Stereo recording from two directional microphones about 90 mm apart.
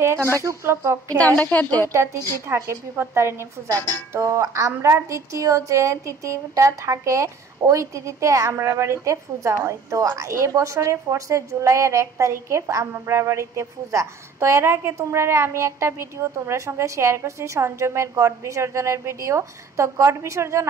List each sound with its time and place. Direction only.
0.0 s a sound: 30° right (ahead or behind)
0.4 s speech: 30° right (ahead or behind)
1.2 s a woman's voice: 15° left (ahead or behind)
2.4 s a woman's voice: 30° right (ahead or behind)